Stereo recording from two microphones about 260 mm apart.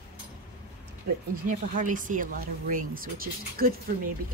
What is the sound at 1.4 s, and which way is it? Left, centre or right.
Speech, right.